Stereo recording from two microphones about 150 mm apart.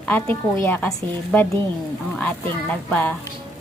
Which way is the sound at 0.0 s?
10° left (ahead or behind).